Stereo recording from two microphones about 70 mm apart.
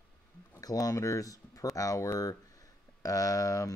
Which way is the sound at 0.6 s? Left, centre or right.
Left.